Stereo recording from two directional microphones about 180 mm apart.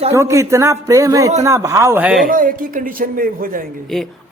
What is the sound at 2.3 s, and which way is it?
Speech, 50° right (ahead or behind).